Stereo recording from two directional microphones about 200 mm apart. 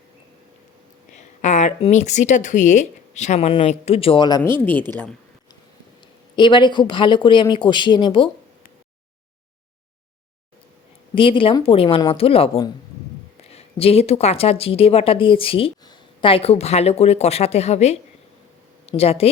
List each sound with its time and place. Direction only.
1.4 s speech: 35° left (ahead or behind); by 4.5 s 20° left (ahead or behind)
4.6 s a woman's voice: 10° left (ahead or behind)
6.3 s speech: 25° left (ahead or behind)
11.1 s speech: 25° left (ahead or behind)